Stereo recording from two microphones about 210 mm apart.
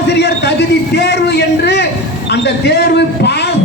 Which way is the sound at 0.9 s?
55° left (ahead or behind).